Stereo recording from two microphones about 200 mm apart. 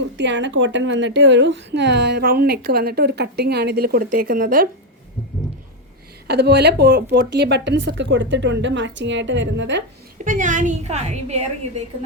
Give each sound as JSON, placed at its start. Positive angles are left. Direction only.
{"t": 0.2, "sound": "a woman's voice", "side_deg": -60}
{"t": 6.2, "sound": "a woman's voice", "side_deg": -55}
{"t": 10.2, "sound": "a woman's voice", "side_deg": -40}